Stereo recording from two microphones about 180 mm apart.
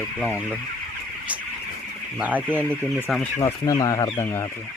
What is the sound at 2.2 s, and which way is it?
Speech, 10° right (ahead or behind).